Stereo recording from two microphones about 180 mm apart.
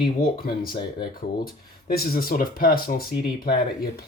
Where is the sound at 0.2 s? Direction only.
55° left (ahead or behind).